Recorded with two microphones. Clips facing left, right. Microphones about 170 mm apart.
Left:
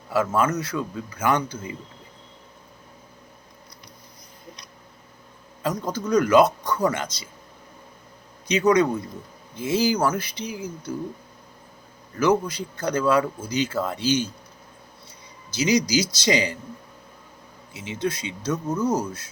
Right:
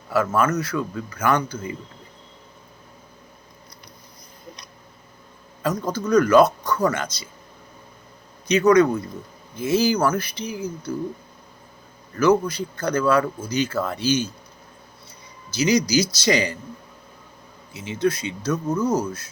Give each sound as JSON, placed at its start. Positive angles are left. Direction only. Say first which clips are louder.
{"t": 0.1, "sound": "speech", "louder": "right 1 dB", "side_deg": 15}
{"t": 5.6, "sound": "speech", "louder": "right 2 dB", "side_deg": 20}
{"t": 8.6, "sound": "speech", "louder": "right 3 dB", "side_deg": 20}
{"t": 12.1, "sound": "speech", "louder": "right 3 dB", "side_deg": 15}
{"t": 15.5, "sound": "speech", "louder": "right 2 dB", "side_deg": 20}
{"t": 17.8, "sound": "speech", "louder": "right 5 dB", "side_deg": 20}